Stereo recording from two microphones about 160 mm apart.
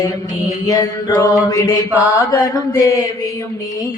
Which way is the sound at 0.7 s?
25° left (ahead or behind).